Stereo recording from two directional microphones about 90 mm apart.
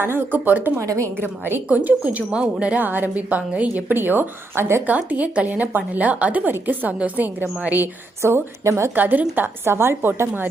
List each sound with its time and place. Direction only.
0.0 s speech: 25° right (ahead or behind)
0.8 s a woman's voice: 35° right (ahead or behind)
1.5 s a woman's voice: 20° right (ahead or behind)
8.2 s a woman's voice: 30° right (ahead or behind)
9.0 s speech: 20° right (ahead or behind)